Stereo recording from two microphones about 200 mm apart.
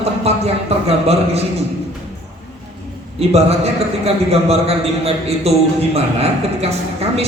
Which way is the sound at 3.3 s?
30° right (ahead or behind).